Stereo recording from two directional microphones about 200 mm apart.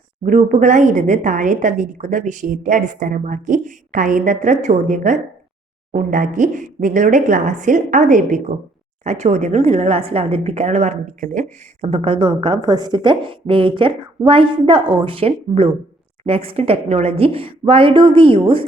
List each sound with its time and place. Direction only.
0.3 s a woman's voice: 40° right (ahead or behind)